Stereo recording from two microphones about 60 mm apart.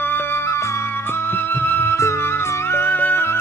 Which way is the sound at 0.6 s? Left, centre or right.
Left.